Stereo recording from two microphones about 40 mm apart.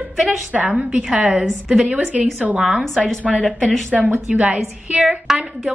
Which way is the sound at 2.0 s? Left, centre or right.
Right.